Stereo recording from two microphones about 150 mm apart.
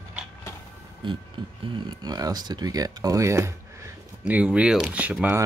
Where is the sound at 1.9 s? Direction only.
25° right (ahead or behind).